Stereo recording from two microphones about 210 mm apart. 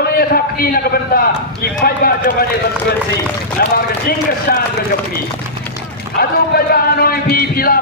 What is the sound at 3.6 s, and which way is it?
Speech, 45° left (ahead or behind).